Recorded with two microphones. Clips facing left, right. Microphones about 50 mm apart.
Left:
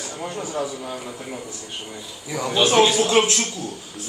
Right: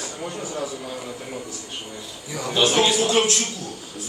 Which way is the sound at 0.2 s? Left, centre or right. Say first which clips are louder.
Left 3 dB; centre.